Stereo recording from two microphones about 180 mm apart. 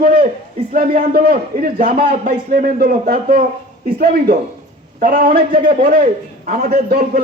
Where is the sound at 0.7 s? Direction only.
55° right (ahead or behind).